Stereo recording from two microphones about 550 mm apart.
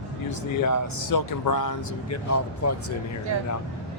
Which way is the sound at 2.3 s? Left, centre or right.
Left.